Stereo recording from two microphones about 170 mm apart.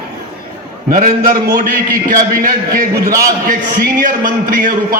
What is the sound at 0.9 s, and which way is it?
A man's voice, 50° right (ahead or behind).